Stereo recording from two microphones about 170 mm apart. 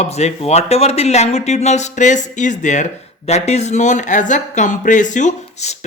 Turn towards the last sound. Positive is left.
turn(degrees=40)  # may be behind; listen again after turning